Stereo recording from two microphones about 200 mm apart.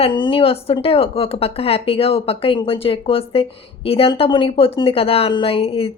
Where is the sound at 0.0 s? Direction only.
25° left (ahead or behind).